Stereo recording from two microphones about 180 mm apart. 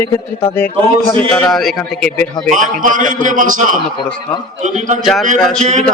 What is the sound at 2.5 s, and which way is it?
A man's voice, 45° right (ahead or behind).